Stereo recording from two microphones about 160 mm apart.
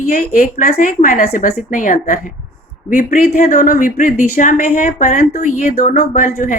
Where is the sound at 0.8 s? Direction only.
55° left (ahead or behind).